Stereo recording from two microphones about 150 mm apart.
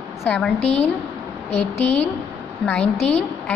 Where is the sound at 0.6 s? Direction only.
45° left (ahead or behind).